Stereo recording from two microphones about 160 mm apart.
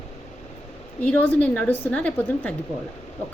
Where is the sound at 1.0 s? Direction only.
10° left (ahead or behind).